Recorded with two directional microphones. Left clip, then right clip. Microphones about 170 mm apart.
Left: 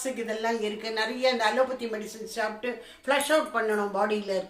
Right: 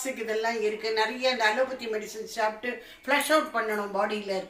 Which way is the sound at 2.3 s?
25° left (ahead or behind).